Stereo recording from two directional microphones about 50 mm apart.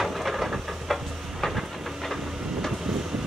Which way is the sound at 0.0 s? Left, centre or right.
Centre.